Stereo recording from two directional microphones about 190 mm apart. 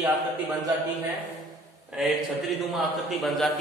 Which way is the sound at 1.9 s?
Centre (ahead or behind).